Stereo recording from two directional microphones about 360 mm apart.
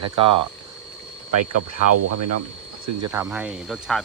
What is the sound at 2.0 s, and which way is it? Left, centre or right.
Speech, right.